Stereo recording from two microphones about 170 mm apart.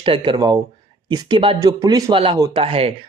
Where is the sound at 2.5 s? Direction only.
35° right (ahead or behind).